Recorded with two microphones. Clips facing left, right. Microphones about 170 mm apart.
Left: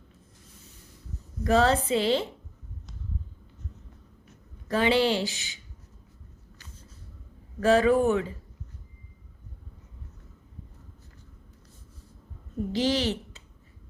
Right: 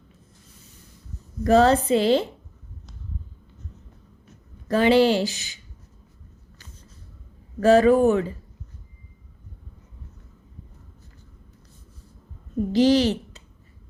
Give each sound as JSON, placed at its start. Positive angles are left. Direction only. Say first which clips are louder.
{"t": 1.5, "sound": "speech", "louder": "right 6 dB", "side_deg": -40}
{"t": 4.7, "sound": "speech", "louder": "right 6 dB", "side_deg": -40}
{"t": 7.6, "sound": "speech", "louder": "right 5 dB", "side_deg": -40}
{"t": 12.7, "sound": "a woman's voice", "louder": "right 8 dB", "side_deg": -40}